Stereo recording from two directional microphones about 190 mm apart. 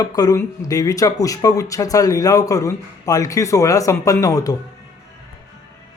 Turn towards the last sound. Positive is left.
turn(degrees=20)  # may be behind; listen again after turning